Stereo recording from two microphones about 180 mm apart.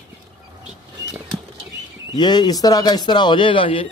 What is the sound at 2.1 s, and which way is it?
Speech, 25° left (ahead or behind).